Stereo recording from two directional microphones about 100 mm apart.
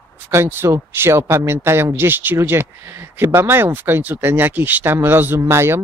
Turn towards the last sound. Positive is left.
turn(degrees=-25)  # may be behind; listen again after turning